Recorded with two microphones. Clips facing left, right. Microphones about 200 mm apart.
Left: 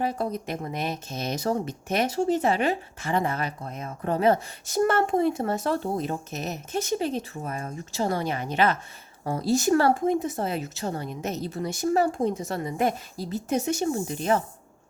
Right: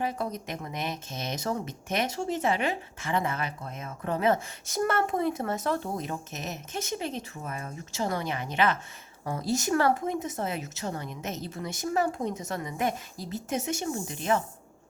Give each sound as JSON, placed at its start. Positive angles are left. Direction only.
{"t": 0.0, "sound": "speech", "side_deg": 35}